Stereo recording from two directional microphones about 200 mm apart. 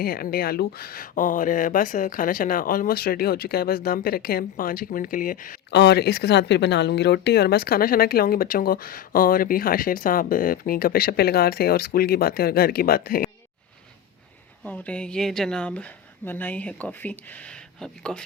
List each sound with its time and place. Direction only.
0.0 s speech: 45° left (ahead or behind)
5.7 s speech: 55° left (ahead or behind)
14.6 s speech: 5° left (ahead or behind)